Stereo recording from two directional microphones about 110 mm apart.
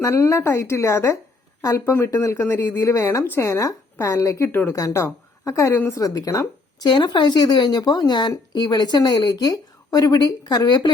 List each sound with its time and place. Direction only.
0.0 s speech: 25° left (ahead or behind)
5.9 s speech: 30° left (ahead or behind)
6.8 s a woman's voice: 40° left (ahead or behind)